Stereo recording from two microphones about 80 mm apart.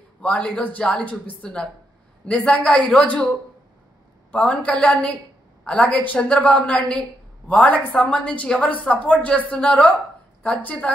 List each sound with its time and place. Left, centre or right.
0.2 s a woman's voice: centre
4.3 s a woman's voice: centre